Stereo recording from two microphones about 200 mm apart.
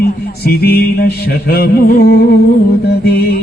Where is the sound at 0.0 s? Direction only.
50° left (ahead or behind).